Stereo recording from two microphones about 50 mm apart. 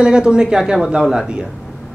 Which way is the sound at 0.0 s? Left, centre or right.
Centre.